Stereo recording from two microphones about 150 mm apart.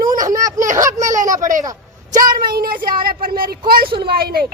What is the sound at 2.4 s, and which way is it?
A child's voice, 80° right.